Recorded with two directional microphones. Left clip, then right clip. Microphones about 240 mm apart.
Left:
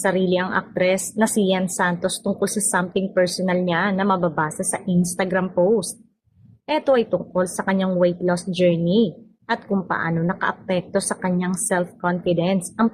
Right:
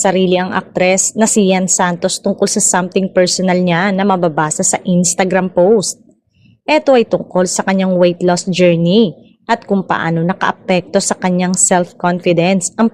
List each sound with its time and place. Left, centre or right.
0.0 s a woman's voice: right